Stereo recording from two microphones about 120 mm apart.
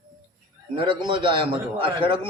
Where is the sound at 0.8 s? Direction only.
45° right (ahead or behind).